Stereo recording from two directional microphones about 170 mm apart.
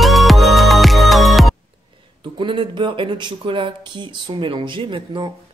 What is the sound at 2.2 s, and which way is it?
Speech, 30° right (ahead or behind).